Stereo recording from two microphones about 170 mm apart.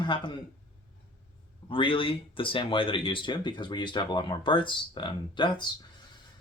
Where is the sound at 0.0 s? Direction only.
30° left (ahead or behind).